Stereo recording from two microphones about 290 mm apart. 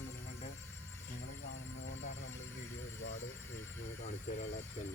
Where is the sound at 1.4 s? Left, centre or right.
Left.